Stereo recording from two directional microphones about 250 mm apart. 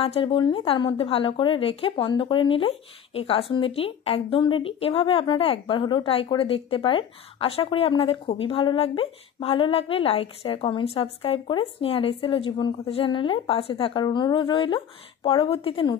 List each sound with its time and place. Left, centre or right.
0.0 s a woman's voice: left